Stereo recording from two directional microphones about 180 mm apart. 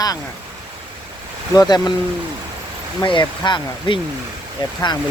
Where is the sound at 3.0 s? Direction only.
25° left (ahead or behind).